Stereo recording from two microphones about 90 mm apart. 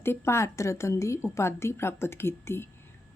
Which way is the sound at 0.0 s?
30° left (ahead or behind).